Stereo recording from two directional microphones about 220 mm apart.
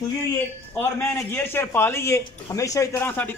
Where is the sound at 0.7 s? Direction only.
10° left (ahead or behind).